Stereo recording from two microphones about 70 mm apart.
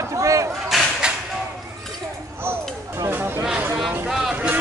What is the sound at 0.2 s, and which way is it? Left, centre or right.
Whip, right.